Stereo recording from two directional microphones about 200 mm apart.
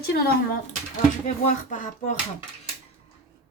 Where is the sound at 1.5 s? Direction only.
40° left (ahead or behind).